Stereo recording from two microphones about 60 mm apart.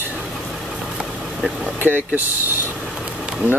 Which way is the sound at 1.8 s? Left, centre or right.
Right.